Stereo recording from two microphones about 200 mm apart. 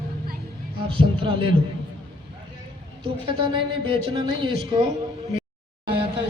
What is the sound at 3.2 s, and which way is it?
A man's voice, 30° right (ahead or behind).